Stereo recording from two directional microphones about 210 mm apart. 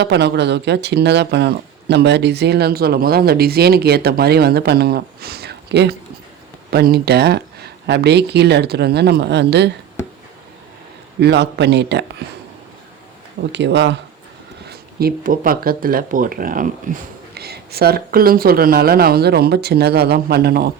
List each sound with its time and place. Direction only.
0.0 s speech: 55° right (ahead or behind)
11.2 s speech: 55° right (ahead or behind)
13.5 s speech: 55° right (ahead or behind)
14.7 s speech: 45° right (ahead or behind)